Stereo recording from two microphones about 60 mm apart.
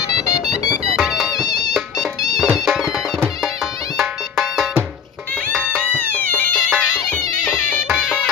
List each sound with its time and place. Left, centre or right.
0.9 s music: centre
1.4 s music: left
2.5 s music: centre
4.0 s music: centre
5.9 s music: left